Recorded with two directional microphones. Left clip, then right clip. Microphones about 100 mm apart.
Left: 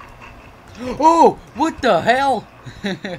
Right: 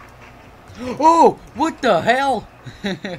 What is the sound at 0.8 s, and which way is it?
Speech, centre (ahead or behind).